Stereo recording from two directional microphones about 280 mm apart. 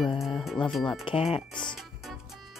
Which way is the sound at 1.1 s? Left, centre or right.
Centre.